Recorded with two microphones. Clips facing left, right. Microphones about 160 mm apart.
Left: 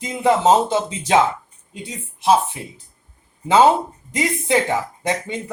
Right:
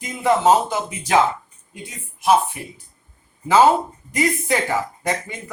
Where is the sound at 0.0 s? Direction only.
25° left (ahead or behind).